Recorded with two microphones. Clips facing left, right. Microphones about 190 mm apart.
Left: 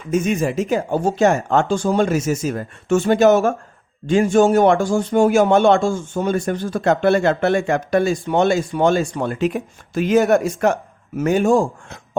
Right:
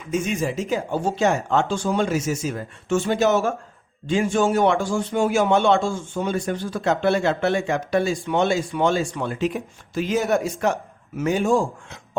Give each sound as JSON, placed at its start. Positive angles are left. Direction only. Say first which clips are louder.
{"t": 0.1, "sound": "a man's voice", "louder": "left 5 dB", "side_deg": 50}